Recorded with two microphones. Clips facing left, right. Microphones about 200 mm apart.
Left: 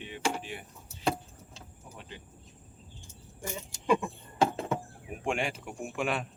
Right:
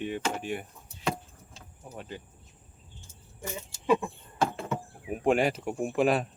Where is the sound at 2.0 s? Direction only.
45° right (ahead or behind).